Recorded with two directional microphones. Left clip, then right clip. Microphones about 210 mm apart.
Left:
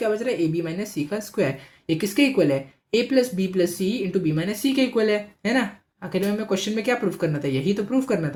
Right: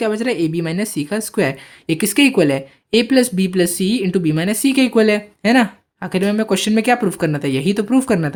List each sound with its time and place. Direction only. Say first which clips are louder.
0.0 s speech: right 4 dB; 40° right (ahead or behind)